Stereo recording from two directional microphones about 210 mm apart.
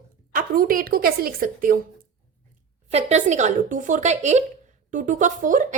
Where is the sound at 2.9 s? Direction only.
30° right (ahead or behind).